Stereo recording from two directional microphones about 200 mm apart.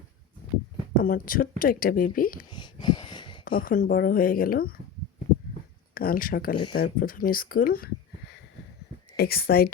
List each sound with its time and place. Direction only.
0.9 s speech: 45° left (ahead or behind)
2.5 s a sound: 20° left (ahead or behind)
3.4 s speech: 45° left (ahead or behind)
5.9 s speech: 45° left (ahead or behind)
9.1 s speech: 50° left (ahead or behind)